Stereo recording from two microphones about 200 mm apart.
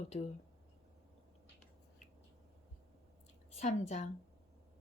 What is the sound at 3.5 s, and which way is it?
Speech, 35° left (ahead or behind).